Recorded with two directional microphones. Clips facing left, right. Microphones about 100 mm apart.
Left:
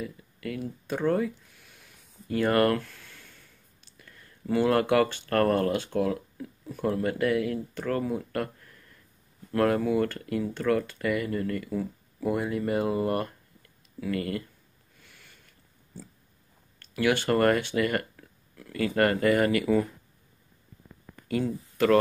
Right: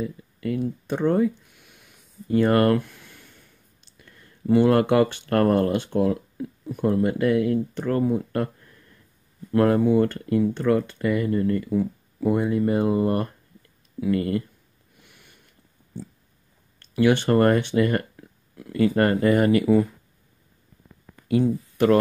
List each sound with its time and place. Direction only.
0.0 s speech: 25° right (ahead or behind)
2.2 s a sound: 25° right (ahead or behind)
5.3 s speech: 20° right (ahead or behind)
15.0 s sniff: 20° right (ahead or behind)
16.9 s speech: 20° right (ahead or behind)
21.3 s speech: 25° right (ahead or behind)